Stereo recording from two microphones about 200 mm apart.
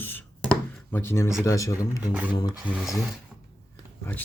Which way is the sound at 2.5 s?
5° right (ahead or behind).